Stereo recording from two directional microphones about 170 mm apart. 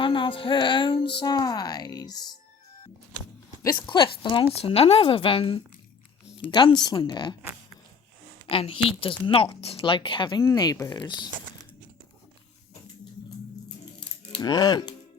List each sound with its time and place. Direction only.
0.0 s music: 30° left (ahead or behind)
1.2 s a woman's voice: 25° left (ahead or behind)
3.6 s a woman's voice: 25° left (ahead or behind)
8.4 s a woman's voice: 35° left (ahead or behind)
14.0 s music: 25° left (ahead or behind)